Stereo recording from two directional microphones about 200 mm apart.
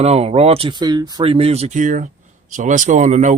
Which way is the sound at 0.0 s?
30° right (ahead or behind).